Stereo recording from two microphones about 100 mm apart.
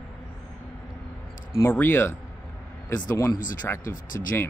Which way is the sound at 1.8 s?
20° left (ahead or behind).